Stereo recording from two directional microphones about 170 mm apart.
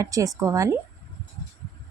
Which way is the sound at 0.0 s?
20° right (ahead or behind).